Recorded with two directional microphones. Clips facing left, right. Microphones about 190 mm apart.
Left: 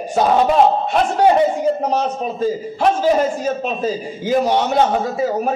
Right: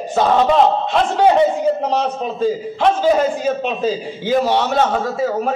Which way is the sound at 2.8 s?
5° left (ahead or behind).